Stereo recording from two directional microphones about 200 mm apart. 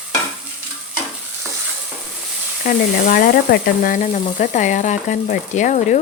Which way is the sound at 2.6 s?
45° left (ahead or behind).